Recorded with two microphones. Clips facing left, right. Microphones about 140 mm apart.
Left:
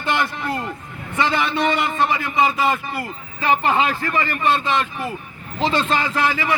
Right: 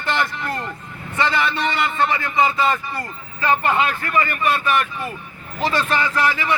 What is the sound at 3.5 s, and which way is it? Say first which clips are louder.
A man's voice: left 1 dB; 20° left (ahead or behind).